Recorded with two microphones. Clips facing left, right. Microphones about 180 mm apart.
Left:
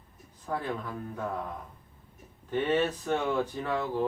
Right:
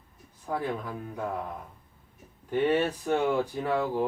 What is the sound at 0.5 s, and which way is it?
Speech, 10° right (ahead or behind).